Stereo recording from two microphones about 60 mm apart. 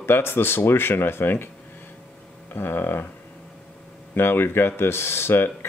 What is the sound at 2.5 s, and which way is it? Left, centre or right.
Speech, left.